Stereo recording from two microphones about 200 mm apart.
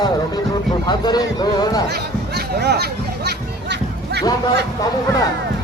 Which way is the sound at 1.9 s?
55° right (ahead or behind).